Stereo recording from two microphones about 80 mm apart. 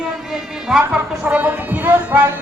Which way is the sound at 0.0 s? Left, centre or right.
Centre.